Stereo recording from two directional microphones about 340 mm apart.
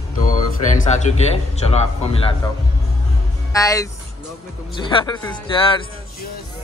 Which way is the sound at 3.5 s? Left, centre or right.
Centre.